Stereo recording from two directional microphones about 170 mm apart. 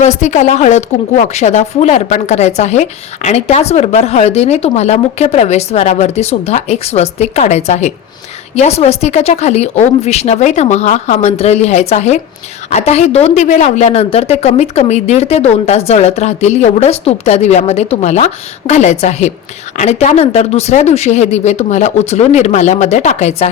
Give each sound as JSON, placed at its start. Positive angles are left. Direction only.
{"t": 0.0, "sound": "a woman's voice", "side_deg": 45}